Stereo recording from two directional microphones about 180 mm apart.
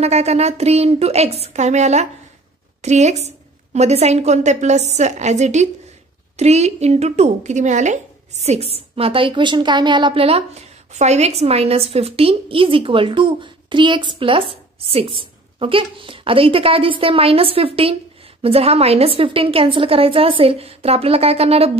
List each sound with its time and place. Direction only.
0.0 s a woman's voice: 35° right (ahead or behind)